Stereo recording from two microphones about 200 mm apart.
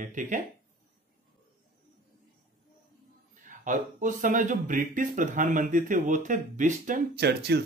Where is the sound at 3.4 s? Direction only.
40° right (ahead or behind).